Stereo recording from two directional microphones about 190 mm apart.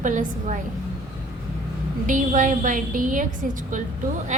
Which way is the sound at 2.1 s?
45° right (ahead or behind).